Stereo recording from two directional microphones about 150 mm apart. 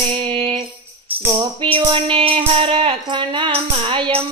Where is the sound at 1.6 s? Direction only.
35° right (ahead or behind).